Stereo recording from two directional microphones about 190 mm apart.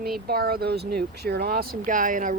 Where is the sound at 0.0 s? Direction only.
55° right (ahead or behind).